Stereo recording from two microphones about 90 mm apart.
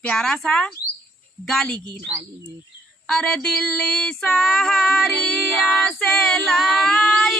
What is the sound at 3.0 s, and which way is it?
Female singing, 10° left (ahead or behind).